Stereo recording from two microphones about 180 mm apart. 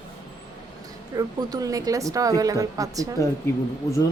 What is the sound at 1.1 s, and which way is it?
A woman's voice, 20° right (ahead or behind).